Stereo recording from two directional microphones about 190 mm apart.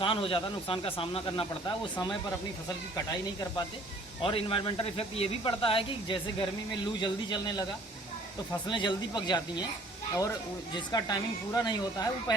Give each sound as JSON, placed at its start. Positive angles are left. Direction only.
{"t": 0.0, "sound": "speech", "side_deg": 25}
{"t": 4.2, "sound": "speech", "side_deg": 30}
{"t": 8.7, "sound": "speech", "side_deg": 25}
{"t": 10.8, "sound": "speech", "side_deg": 20}